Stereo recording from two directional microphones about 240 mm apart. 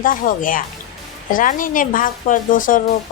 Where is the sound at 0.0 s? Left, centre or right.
Left.